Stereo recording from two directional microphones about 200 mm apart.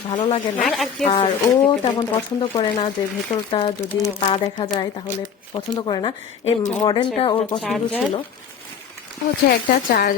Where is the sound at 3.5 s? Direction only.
25° left (ahead or behind).